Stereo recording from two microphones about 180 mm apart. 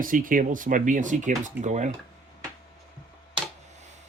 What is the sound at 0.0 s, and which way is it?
Speech, 50° right (ahead or behind).